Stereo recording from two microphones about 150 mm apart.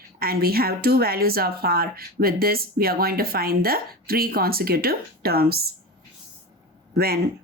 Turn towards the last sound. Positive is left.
turn(degrees=-90)